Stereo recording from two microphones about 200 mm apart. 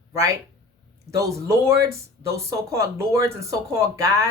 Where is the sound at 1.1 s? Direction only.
15° right (ahead or behind).